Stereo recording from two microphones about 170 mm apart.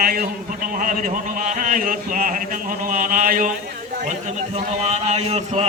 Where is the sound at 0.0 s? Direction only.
55° right (ahead or behind).